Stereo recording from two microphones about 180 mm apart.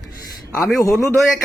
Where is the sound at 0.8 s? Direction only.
15° left (ahead or behind).